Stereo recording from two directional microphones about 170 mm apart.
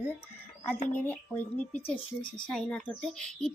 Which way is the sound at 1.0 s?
10° left (ahead or behind).